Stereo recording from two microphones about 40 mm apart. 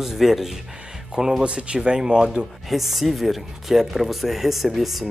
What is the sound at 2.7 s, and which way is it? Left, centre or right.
Speech, centre.